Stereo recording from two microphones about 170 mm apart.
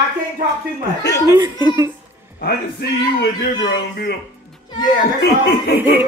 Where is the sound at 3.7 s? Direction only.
70° left (ahead or behind).